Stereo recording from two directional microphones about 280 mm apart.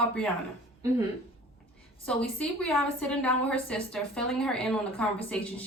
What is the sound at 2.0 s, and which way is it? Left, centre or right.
A woman's voice, centre.